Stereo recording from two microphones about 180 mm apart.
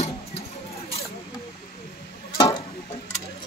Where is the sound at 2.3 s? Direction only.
25° left (ahead or behind).